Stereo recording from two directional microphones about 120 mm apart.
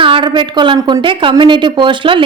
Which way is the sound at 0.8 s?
30° right (ahead or behind).